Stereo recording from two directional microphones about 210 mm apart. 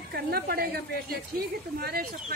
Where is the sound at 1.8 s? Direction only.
50° right (ahead or behind).